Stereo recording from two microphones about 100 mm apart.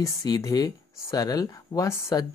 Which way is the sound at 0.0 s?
35° left (ahead or behind).